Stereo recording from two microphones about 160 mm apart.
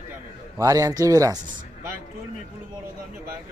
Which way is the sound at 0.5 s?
20° right (ahead or behind).